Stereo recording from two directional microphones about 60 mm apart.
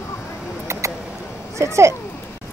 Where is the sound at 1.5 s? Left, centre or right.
Right.